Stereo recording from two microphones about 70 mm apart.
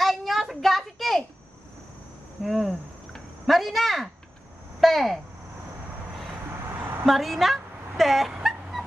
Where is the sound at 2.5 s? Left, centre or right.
Centre.